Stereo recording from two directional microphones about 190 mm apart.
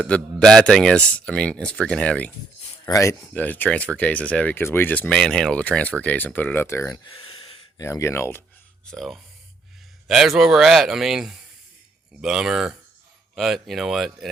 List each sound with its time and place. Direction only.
0.1 s a man's voice: 5° left (ahead or behind)
2.8 s speech: 15° left (ahead or behind)
7.3 s a sound: 30° left (ahead or behind)
7.8 s speech: 15° left (ahead or behind)
8.9 s a man's voice: centre (ahead or behind)